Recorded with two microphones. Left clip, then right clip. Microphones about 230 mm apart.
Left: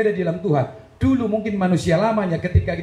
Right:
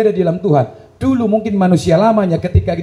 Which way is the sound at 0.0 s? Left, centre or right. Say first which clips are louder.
Right 7 dB; right.